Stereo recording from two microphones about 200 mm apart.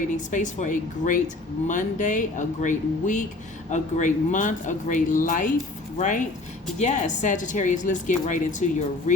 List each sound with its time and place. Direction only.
0.3 s speech: 40° left (ahead or behind)